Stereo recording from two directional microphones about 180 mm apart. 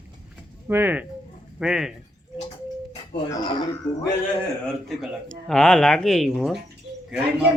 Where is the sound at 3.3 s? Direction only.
25° left (ahead or behind).